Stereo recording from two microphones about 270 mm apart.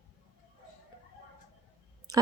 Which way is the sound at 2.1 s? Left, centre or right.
Centre.